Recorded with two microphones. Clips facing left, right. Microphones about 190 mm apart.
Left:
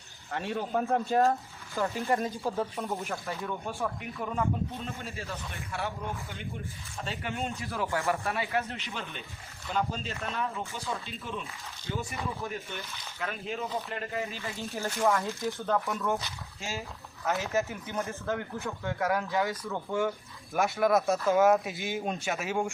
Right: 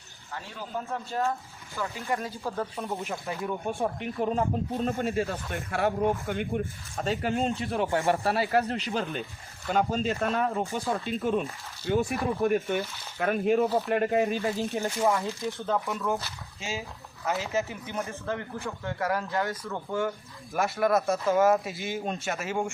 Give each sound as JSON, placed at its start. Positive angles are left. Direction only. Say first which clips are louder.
{"t": 0.3, "sound": "speech", "louder": "left 6 dB", "side_deg": 60}
{"t": 1.2, "sound": "speech", "louder": "left 4 dB", "side_deg": 45}
{"t": 2.3, "sound": "speech", "louder": "left 1 dB", "side_deg": 15}
{"t": 2.7, "sound": "speech", "louder": "right 1 dB", "side_deg": 0}
{"t": 3.2, "sound": "speech", "louder": "right 4 dB", "side_deg": -15}
{"t": 3.8, "sound": "speech", "louder": "right 8 dB", "side_deg": -30}
{"t": 4.9, "sound": "speech", "louder": "right 10 dB", "side_deg": -50}
{"t": 14.8, "sound": "speech", "louder": "left 1 dB", "side_deg": -15}
{"t": 15.4, "sound": "speech", "louder": "even", "side_deg": 0}